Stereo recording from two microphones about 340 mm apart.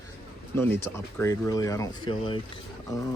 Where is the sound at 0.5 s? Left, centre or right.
Centre.